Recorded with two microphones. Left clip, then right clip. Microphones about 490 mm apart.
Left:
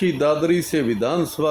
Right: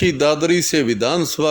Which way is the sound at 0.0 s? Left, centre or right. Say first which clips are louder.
Right 3 dB; centre.